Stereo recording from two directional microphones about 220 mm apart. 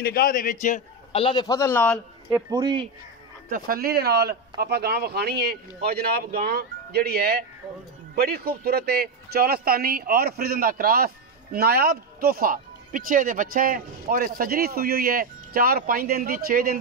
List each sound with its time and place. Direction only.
0.0 s a man's voice: 45° left (ahead or behind); by 2.0 s 10° left (ahead or behind)
2.2 s speech: 15° right (ahead or behind)
3.4 s speech: 40° right (ahead or behind)